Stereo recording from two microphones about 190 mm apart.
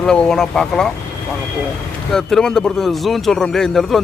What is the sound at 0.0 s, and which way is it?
Speech, 5° left (ahead or behind).